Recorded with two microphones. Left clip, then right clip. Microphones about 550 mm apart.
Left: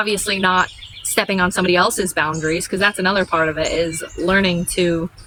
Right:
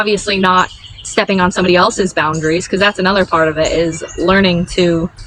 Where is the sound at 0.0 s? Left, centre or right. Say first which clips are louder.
Right 5 dB; left.